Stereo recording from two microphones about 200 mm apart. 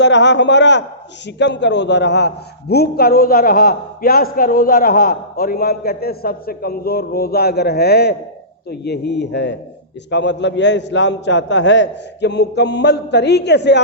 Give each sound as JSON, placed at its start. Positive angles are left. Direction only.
{"t": 0.0, "sound": "a man's voice", "side_deg": 60}